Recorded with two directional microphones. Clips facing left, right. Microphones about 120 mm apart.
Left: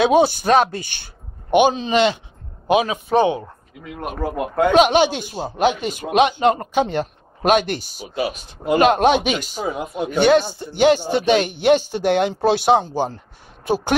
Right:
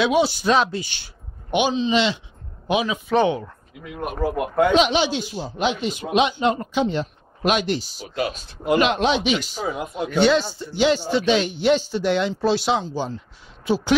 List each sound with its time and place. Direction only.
0.0 s a man's voice: 50° left (ahead or behind)
3.2 s speech: 25° left (ahead or behind)
4.0 s speech: 5° right (ahead or behind)
4.7 s a man's voice: 55° left (ahead or behind)
8.0 s speech: 10° left (ahead or behind)
8.7 s a man's voice: 45° left (ahead or behind)
9.6 s speech: 5° left (ahead or behind)
10.5 s a man's voice: 55° left (ahead or behind)